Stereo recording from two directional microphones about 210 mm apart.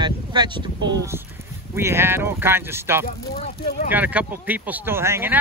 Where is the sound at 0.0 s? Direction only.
20° right (ahead or behind).